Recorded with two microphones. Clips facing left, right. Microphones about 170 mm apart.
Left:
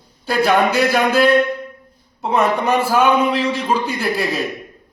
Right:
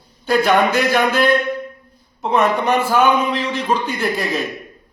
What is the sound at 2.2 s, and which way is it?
Speech, 10° left (ahead or behind).